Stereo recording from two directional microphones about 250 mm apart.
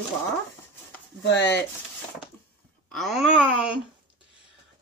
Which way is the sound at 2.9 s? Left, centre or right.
Centre.